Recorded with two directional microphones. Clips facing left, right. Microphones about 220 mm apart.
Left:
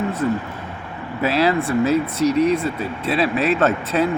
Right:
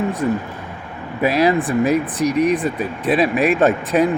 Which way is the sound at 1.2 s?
15° right (ahead or behind).